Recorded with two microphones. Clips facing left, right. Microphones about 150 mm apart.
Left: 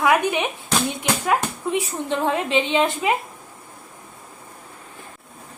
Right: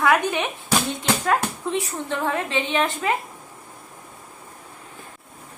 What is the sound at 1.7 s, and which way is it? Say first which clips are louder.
A woman's voice: left 5 dB; 20° left (ahead or behind).